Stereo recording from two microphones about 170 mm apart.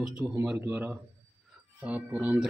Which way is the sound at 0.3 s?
15° right (ahead or behind).